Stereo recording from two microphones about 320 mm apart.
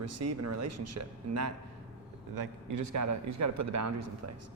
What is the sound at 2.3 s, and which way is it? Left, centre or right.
A man's voice, right.